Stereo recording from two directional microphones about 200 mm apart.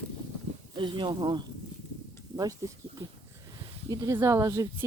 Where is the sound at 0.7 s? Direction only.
25° right (ahead or behind).